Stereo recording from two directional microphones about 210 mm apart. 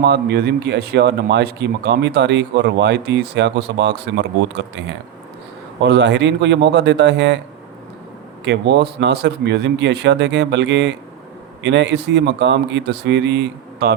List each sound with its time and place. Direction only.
0.0 s speech: 50° right (ahead or behind)
8.4 s speech: 55° right (ahead or behind)